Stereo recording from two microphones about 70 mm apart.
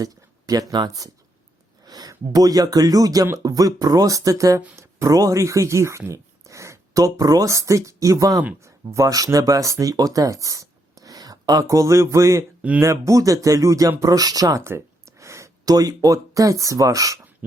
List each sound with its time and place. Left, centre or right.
0.0 s speech: right
4.8 s a sound: right
5.1 s speech: right
11.7 s speech: right
14.6 s speech: right